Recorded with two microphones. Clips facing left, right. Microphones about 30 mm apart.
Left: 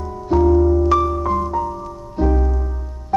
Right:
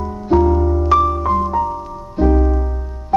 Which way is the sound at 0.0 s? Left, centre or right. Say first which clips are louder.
Right 2 dB; centre.